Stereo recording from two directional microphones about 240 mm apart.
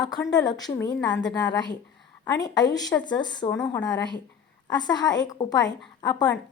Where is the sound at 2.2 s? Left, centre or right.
Centre.